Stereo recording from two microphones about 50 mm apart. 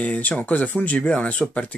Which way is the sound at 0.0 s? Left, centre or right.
Left.